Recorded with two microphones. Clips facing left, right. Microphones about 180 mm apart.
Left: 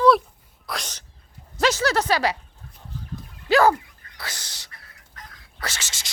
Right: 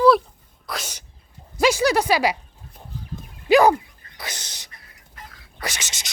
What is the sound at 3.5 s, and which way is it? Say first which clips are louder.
Dog: right 3 dB; 15° right (ahead or behind).